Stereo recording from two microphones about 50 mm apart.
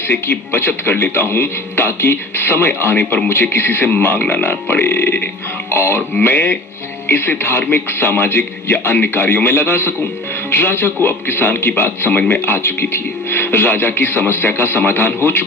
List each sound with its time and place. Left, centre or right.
0.1 s a man's voice: left